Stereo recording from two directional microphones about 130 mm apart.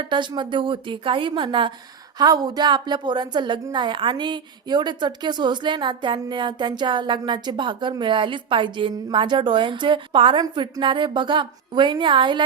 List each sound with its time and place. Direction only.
0.1 s a woman's voice: 35° right (ahead or behind)